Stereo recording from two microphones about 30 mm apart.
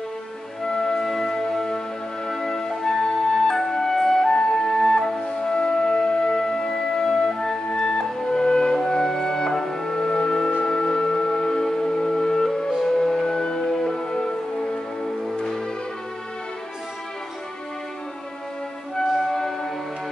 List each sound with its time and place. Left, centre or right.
0.7 s music: left
0.9 s music: centre
5.2 s music: left
19.1 s music: centre